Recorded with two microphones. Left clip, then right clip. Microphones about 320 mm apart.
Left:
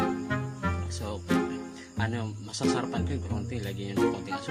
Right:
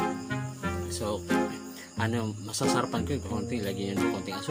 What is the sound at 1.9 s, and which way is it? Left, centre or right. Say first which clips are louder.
Music: right 3 dB; left.